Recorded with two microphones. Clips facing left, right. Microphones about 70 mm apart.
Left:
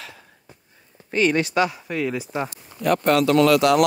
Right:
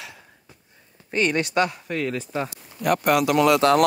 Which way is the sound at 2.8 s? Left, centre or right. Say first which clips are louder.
Left 1 dB; centre.